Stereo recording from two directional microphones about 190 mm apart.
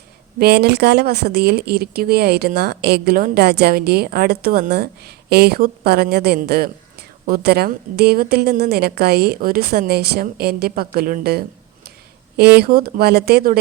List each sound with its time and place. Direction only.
0.3 s speech: 55° right (ahead or behind)